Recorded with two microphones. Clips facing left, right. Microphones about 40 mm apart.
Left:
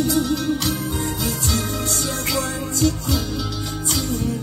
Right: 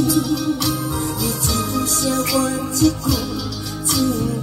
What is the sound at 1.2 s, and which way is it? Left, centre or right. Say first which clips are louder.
Music: right 2 dB; left.